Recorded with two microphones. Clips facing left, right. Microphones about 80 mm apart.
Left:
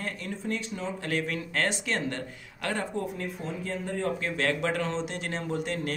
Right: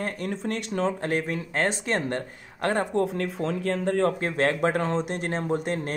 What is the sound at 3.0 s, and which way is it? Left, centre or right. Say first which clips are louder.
Speech: right 7 dB; right.